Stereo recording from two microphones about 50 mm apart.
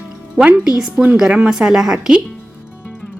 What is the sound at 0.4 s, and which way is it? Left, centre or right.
A woman's voice, centre.